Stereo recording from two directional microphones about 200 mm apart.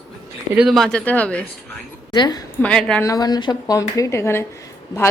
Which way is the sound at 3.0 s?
20° left (ahead or behind).